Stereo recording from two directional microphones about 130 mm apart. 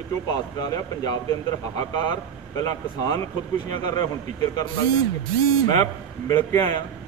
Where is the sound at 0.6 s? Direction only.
30° left (ahead or behind).